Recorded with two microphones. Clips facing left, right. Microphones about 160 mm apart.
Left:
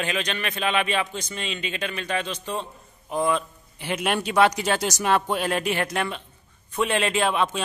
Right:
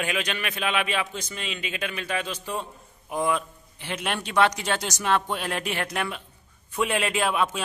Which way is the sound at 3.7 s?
10° left (ahead or behind).